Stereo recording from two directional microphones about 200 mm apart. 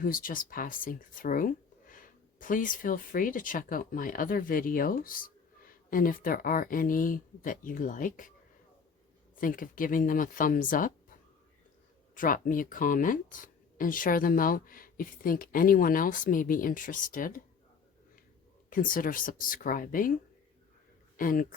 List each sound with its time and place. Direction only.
0.0 s speech: 45° left (ahead or behind)
9.3 s speech: 45° left (ahead or behind)
12.1 s speech: 45° left (ahead or behind)
18.7 s speech: 45° left (ahead or behind)
21.2 s speech: 45° left (ahead or behind)